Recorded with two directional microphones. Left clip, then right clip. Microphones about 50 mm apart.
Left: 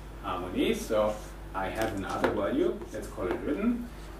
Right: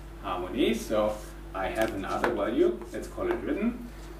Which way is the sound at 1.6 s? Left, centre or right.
Centre.